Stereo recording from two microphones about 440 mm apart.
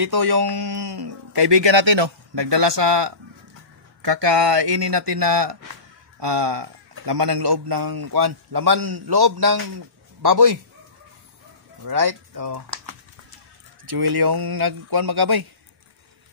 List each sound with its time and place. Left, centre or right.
0.0 s a man's voice: right
11.8 s speech: right
13.9 s speech: right